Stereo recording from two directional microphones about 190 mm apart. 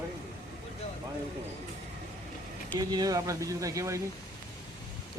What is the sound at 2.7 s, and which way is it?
Speech, 20° right (ahead or behind).